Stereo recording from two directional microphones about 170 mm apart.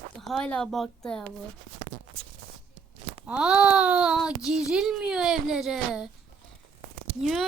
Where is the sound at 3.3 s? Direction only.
5° right (ahead or behind).